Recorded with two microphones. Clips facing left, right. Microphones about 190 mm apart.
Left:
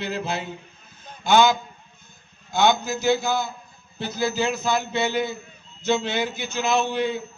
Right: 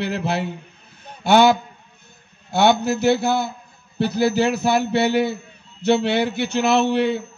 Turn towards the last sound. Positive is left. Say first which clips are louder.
# right 5 dB
turn(degrees=-65)  # may be behind; listen again after turning